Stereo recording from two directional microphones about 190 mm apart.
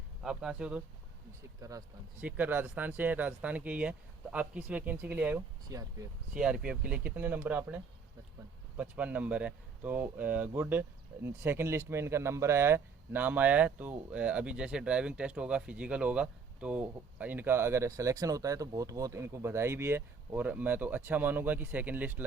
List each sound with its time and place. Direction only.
0.2 s speech: 5° right (ahead or behind)
1.6 s speech: 15° right (ahead or behind)
6.3 s speech: 5° right (ahead or behind)
8.8 s speech: 10° right (ahead or behind)